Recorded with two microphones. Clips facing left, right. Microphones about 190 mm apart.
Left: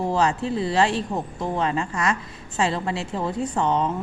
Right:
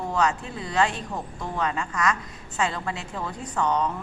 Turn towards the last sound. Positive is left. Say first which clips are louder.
# left 2 dB
turn(degrees=25)  # may be behind; listen again after turning